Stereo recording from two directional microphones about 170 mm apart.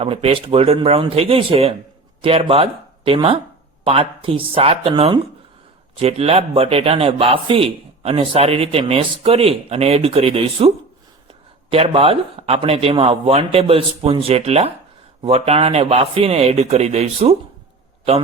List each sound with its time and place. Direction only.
0.0 s a man's voice: 35° right (ahead or behind)
11.7 s a man's voice: 35° right (ahead or behind)